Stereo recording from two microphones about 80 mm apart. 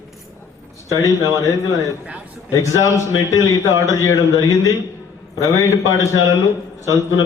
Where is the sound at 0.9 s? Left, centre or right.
Left.